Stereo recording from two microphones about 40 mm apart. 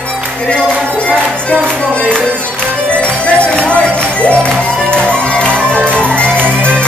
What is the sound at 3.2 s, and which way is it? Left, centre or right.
Music, left.